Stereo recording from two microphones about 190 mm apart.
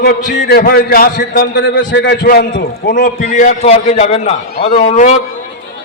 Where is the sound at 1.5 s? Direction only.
60° left (ahead or behind); by 5.1 s 40° left (ahead or behind).